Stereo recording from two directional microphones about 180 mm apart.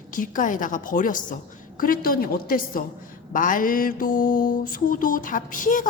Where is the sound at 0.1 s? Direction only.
45° left (ahead or behind).